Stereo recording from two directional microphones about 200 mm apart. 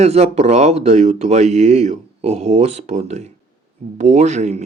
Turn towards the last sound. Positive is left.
turn(degrees=-35)  # may be behind; listen again after turning